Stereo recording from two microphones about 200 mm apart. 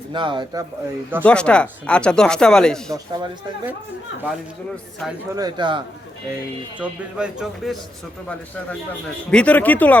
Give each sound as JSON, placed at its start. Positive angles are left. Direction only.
{"t": 0.1, "sound": "speech", "side_deg": -25}
{"t": 1.2, "sound": "speech", "side_deg": 5}
{"t": 5.3, "sound": "speech", "side_deg": -20}
{"t": 6.7, "sound": "speech", "side_deg": -5}
{"t": 9.3, "sound": "speech", "side_deg": 5}